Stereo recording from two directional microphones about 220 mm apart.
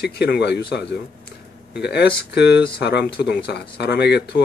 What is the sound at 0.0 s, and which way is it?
Speech, 50° left (ahead or behind).